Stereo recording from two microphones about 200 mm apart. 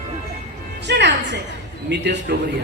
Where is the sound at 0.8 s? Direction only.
60° right (ahead or behind).